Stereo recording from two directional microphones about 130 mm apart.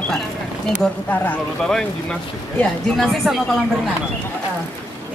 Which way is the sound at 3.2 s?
Centre (ahead or behind).